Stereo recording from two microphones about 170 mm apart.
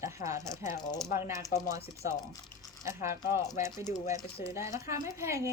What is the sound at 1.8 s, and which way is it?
Speech, 40° left (ahead or behind).